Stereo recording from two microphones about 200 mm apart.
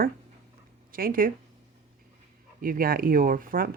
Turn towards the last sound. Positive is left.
turn(degrees=-45)  # may be behind; listen again after turning